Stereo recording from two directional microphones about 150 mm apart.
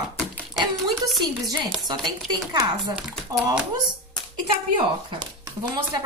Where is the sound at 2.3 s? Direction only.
25° right (ahead or behind).